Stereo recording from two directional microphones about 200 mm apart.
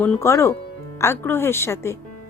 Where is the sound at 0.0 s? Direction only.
15° left (ahead or behind).